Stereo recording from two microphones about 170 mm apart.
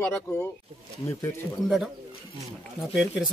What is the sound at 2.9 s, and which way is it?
Speech, 5° right (ahead or behind).